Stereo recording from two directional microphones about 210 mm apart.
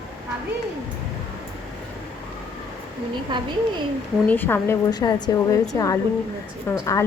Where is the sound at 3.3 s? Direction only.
20° right (ahead or behind).